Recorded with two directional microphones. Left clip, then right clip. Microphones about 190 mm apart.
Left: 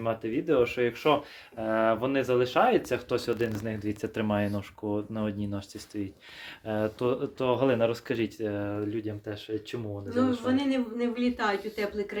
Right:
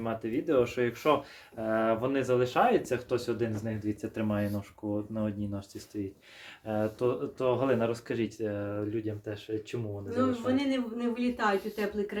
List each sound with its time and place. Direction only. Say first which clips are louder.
0.0 s speech: left 3 dB; 25° left (ahead or behind); by 3.3 s 40° left (ahead or behind)
4.1 s speech: left 5 dB; 55° left (ahead or behind)
6.7 s speech: left 1 dB; 35° left (ahead or behind)
10.2 s speech: left 2 dB; centre (ahead or behind)